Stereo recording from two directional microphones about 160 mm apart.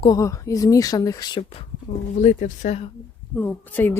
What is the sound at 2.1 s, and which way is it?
Speech, 50° left (ahead or behind).